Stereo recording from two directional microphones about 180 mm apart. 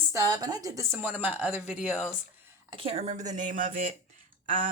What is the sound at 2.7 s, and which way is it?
A woman's voice, 30° right (ahead or behind).